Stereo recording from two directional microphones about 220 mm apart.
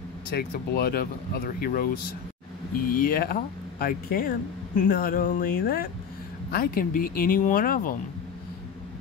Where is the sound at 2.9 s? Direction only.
40° left (ahead or behind).